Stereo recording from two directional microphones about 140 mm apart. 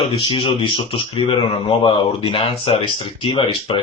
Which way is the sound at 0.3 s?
40° left (ahead or behind).